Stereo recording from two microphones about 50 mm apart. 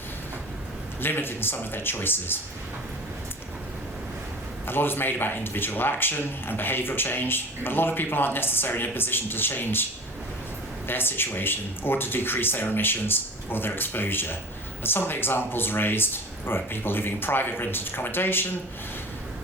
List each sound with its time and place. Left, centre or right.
1.0 s a man's voice: left
4.6 s a man's voice: left
10.8 s a man's voice: left